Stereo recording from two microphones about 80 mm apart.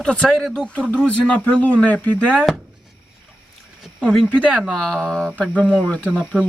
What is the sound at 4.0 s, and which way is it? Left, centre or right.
Speech, centre.